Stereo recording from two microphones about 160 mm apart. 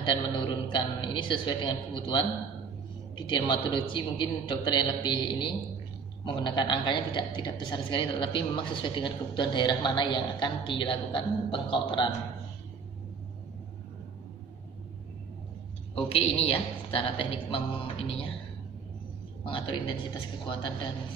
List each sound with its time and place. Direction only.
0.0 s a woman's voice: 30° left (ahead or behind)
3.3 s a woman's voice: 30° left (ahead or behind)
15.9 s a woman's voice: 35° left (ahead or behind)
19.4 s a woman's voice: 35° left (ahead or behind)